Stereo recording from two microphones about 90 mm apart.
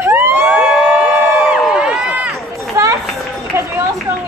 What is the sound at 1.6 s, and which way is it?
Run, 10° right (ahead or behind).